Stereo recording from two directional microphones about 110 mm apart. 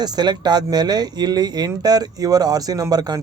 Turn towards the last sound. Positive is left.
turn(degrees=-35)  # may be behind; listen again after turning